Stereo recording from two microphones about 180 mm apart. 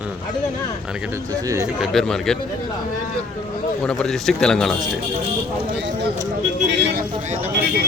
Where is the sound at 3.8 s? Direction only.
5° left (ahead or behind).